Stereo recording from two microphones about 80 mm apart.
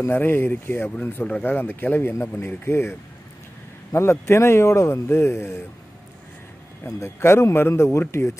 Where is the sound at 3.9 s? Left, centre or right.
Left.